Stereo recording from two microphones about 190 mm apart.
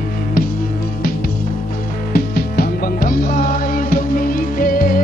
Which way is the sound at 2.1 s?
55° left (ahead or behind).